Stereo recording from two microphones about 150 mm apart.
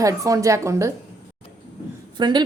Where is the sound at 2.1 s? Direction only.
30° right (ahead or behind).